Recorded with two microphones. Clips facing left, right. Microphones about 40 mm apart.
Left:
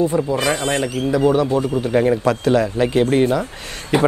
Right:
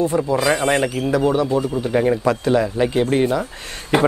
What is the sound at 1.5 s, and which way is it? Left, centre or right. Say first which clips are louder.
Speech: left 1 dB; left.